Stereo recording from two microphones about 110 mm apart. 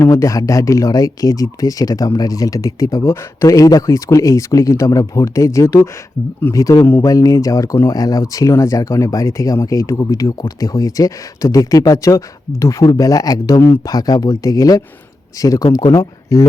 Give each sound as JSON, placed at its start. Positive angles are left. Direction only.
{"t": 0.0, "sound": "speech", "side_deg": 25}
{"t": 6.8, "sound": "speech", "side_deg": 20}
{"t": 7.1, "sound": "speech", "side_deg": 30}